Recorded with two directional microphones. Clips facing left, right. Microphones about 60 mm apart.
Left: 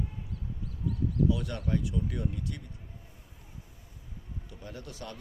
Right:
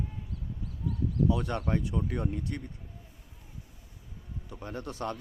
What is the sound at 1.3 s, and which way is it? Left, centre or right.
Speech, right.